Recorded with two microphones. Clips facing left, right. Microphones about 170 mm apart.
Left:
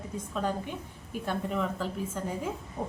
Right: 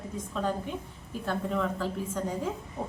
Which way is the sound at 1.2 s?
10° left (ahead or behind).